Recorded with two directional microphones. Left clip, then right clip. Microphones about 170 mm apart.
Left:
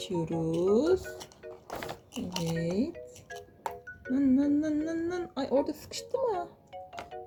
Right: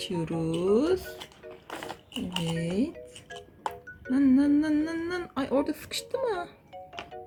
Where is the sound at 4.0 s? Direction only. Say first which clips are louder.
Right 4 dB; 10° right (ahead or behind); by 6.5 s 25° right (ahead or behind).